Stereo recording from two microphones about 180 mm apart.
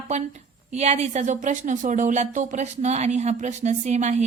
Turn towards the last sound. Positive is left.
turn(degrees=-40)  # may be behind; listen again after turning